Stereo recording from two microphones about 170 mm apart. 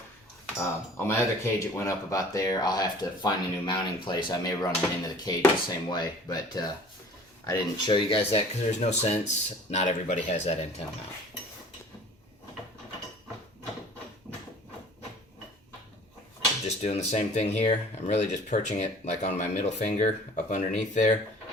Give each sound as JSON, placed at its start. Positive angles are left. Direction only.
{"t": 0.9, "sound": "speech", "side_deg": 15}
{"t": 7.9, "sound": "speech", "side_deg": 30}
{"t": 16.6, "sound": "speech", "side_deg": 40}